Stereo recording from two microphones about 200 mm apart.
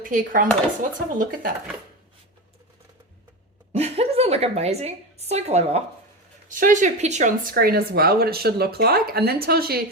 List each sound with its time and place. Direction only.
0.0 s speech: 45° right (ahead or behind)
3.7 s a woman's voice: 30° right (ahead or behind); by 9.8 s 50° right (ahead or behind)